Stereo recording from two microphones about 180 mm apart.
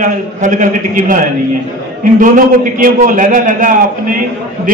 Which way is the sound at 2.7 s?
50° right (ahead or behind).